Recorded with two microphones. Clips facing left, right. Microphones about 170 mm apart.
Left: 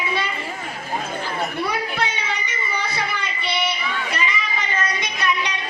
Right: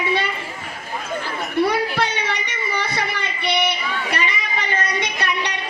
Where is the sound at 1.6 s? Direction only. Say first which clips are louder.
Right 4 dB; 65° right (ahead or behind).